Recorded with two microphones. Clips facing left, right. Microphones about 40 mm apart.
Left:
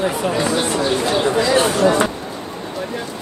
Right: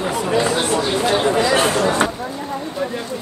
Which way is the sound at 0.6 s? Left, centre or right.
Right.